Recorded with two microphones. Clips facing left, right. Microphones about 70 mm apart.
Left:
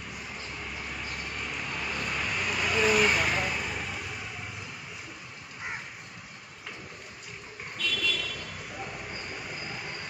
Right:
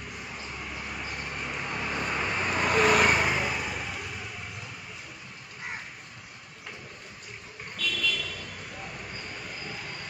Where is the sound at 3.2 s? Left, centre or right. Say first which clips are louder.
Right 1 dB; centre.